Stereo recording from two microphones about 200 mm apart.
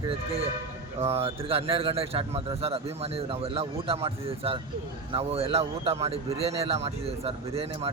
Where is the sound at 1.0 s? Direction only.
30° right (ahead or behind).